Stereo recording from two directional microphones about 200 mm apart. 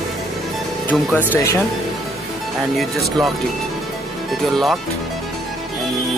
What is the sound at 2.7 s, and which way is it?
Speech, centre (ahead or behind).